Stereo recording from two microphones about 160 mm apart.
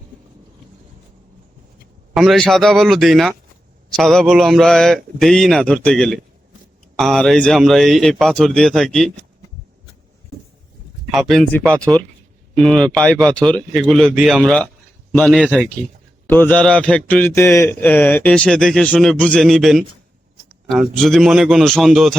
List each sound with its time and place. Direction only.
2.1 s a man's voice: centre (ahead or behind)
11.1 s a man's voice: centre (ahead or behind)